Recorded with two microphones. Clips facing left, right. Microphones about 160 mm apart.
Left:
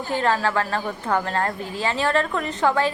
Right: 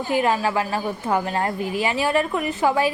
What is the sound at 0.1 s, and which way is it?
A woman's voice, 15° right (ahead or behind).